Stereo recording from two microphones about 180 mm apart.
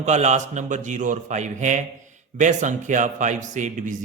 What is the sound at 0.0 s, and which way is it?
Speech, 40° right (ahead or behind).